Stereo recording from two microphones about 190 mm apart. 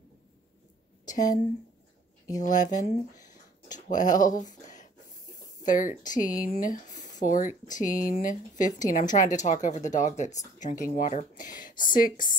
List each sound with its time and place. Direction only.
1.0 s a woman's voice: 40° left (ahead or behind)
2.4 s speech: 40° left (ahead or behind)
4.5 s a sound: 40° left (ahead or behind)
5.6 s speech: 45° left (ahead or behind)